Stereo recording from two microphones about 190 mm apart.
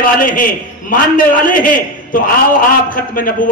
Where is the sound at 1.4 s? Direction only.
45° left (ahead or behind).